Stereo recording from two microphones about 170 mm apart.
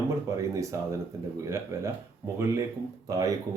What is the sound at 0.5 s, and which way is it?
Speech, 20° right (ahead or behind).